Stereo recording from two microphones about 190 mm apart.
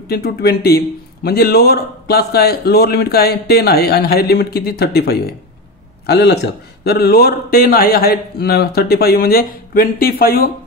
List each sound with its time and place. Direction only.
0.1 s a man's voice: 55° left (ahead or behind)